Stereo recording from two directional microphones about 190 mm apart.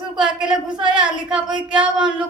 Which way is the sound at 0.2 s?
5° right (ahead or behind).